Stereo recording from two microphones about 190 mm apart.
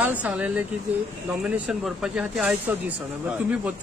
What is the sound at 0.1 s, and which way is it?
Speech, 10° right (ahead or behind).